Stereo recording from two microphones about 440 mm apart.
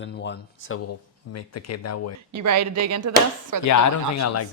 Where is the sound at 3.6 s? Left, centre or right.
Left.